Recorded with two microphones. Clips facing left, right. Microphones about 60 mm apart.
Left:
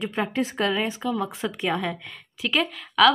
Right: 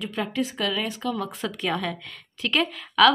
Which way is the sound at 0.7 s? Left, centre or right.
Centre.